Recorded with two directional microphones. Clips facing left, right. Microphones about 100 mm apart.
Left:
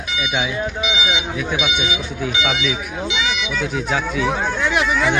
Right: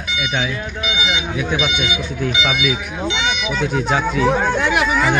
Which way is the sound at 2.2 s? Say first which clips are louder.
Right 2 dB; centre (ahead or behind).